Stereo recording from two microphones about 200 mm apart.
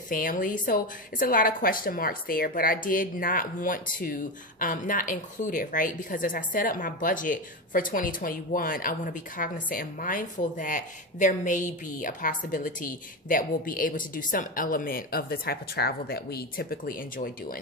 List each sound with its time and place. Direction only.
0.1 s a woman's voice: 45° left (ahead or behind)